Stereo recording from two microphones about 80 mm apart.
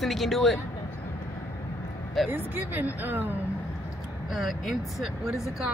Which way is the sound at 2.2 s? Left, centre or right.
Right.